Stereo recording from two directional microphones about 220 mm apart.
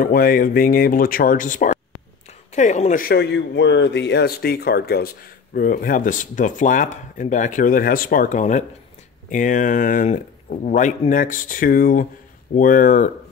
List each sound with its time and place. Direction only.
0.0 s a man's voice: 40° left (ahead or behind)